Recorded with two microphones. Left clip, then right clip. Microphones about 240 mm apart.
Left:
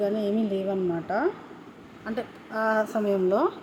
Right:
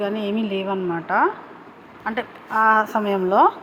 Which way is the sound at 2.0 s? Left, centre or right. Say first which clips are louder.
Right 7 dB; centre.